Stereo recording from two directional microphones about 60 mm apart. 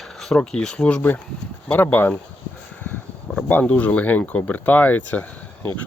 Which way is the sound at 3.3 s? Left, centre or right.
Centre.